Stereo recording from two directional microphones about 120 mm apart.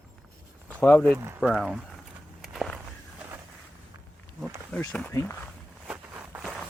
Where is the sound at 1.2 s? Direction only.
20° right (ahead or behind).